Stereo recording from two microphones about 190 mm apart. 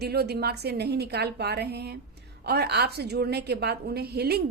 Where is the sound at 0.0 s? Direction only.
55° right (ahead or behind).